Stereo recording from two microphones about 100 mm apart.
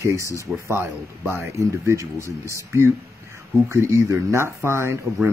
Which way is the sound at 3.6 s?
30° right (ahead or behind).